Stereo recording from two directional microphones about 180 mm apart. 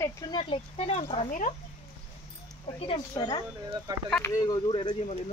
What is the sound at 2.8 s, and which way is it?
Speech, 25° left (ahead or behind).